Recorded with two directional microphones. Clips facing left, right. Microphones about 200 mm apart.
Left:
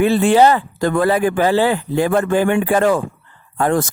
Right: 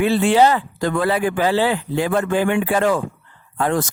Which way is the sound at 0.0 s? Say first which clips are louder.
Left 3 dB; 50° left (ahead or behind).